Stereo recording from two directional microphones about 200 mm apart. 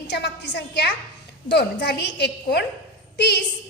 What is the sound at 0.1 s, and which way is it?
A woman's voice, 60° left (ahead or behind).